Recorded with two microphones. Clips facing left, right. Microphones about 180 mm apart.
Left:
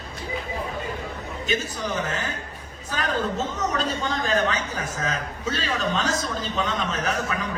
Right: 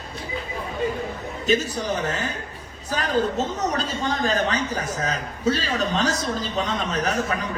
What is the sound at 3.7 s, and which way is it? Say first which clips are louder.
A man's voice: right 1 dB; 40° right (ahead or behind).